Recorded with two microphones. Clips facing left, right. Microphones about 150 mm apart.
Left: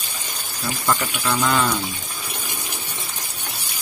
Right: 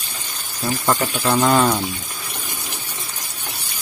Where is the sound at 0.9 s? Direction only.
35° right (ahead or behind).